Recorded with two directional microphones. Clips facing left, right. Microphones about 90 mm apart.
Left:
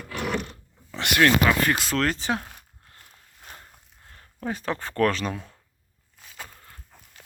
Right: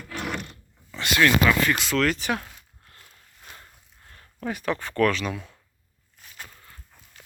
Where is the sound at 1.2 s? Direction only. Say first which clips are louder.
Even; 45° left (ahead or behind).